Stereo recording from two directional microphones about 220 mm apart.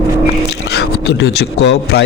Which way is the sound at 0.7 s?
50° left (ahead or behind).